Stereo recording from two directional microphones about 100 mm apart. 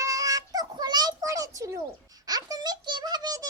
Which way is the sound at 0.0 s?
35° right (ahead or behind).